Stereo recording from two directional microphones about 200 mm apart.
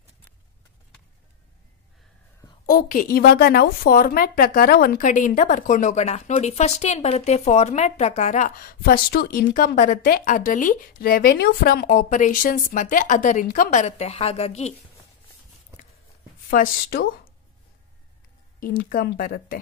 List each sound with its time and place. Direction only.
2.6 s a woman's voice: 40° left (ahead or behind)
16.4 s a woman's voice: 50° left (ahead or behind)
18.9 s a woman's voice: 50° left (ahead or behind)